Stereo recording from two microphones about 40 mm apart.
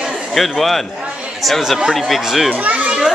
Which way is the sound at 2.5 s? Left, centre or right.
Right.